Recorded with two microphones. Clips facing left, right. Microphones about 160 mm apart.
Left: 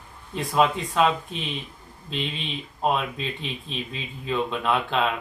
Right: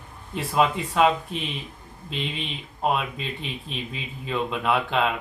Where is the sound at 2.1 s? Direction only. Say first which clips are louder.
Left 1 dB; centre (ahead or behind).